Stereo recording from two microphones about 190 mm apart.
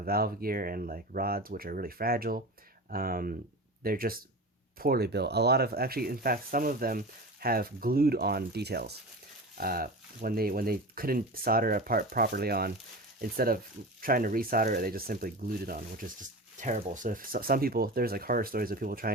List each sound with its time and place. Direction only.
0.0 s speech: 50° right (ahead or behind)